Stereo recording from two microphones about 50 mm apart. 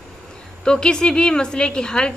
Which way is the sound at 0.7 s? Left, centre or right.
Centre.